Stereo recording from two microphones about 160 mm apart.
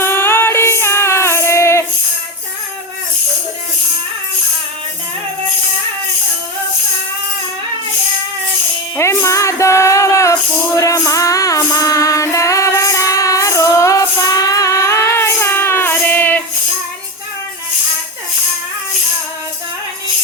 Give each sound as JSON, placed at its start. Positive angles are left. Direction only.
{"t": 0.0, "sound": "music", "side_deg": 15}
{"t": 9.0, "sound": "music", "side_deg": 20}